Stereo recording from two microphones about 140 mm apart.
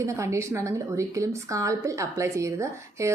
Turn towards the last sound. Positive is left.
turn(degrees=-20)  # may be behind; listen again after turning